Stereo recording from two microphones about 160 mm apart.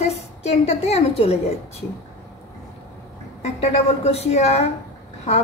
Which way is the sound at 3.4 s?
45° left (ahead or behind).